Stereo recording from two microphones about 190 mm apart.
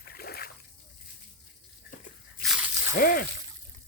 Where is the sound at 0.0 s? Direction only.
55° left (ahead or behind).